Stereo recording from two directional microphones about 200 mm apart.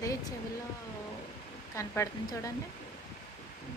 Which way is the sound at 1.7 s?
15° left (ahead or behind).